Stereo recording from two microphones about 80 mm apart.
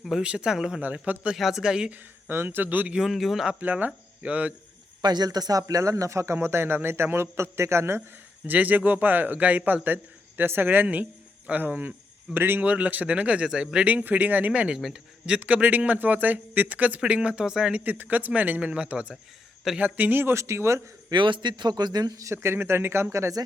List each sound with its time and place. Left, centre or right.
0.2 s a man's voice: centre
0.8 s speech: centre
1.4 s a man's voice: centre
2.2 s speech: right
3.0 s a man's voice: centre
3.6 s speech: centre
5.0 s speech: right
8.4 s a man's voice: right
21.1 s speech: right